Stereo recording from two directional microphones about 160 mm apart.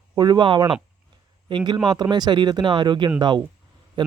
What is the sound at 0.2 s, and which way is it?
Speech, 25° right (ahead or behind).